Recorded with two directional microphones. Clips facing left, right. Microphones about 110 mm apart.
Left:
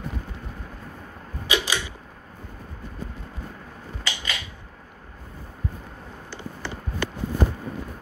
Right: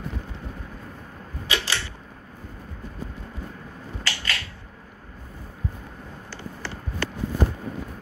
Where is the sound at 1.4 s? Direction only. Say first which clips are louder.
Left 3 dB; 15° left (ahead or behind).